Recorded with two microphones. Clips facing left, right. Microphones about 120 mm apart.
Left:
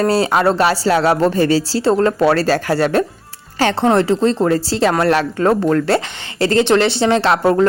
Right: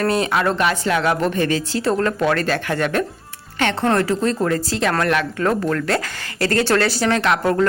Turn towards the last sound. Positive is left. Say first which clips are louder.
# left 4 dB
turn(degrees=30)  # may be behind; listen again after turning